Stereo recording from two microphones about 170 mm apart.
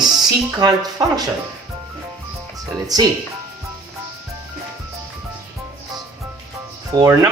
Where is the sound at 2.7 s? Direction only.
25° right (ahead or behind).